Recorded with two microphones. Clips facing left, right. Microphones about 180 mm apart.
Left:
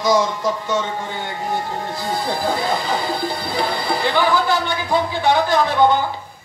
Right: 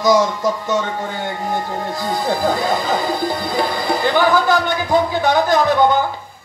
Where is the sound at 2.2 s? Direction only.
45° right (ahead or behind).